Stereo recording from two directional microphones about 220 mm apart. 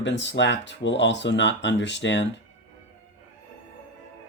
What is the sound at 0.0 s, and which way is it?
Speech, 55° left (ahead or behind).